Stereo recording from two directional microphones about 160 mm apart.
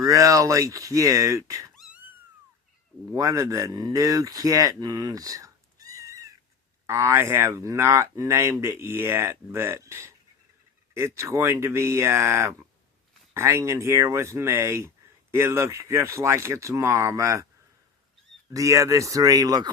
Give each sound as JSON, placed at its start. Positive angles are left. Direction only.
{"t": 0.0, "sound": "speech", "side_deg": -20}
{"t": 1.7, "sound": "cat", "side_deg": 0}
{"t": 3.1, "sound": "speech", "side_deg": -20}
{"t": 18.5, "sound": "speech", "side_deg": -20}